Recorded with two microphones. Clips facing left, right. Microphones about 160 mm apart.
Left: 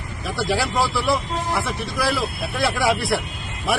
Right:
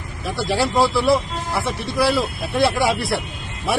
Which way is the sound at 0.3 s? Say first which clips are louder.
Even; centre (ahead or behind).